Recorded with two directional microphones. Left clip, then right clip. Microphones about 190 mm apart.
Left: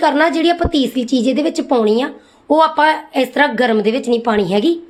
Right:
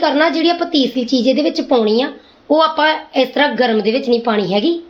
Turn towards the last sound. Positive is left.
turn(degrees=30)  # may be behind; listen again after turning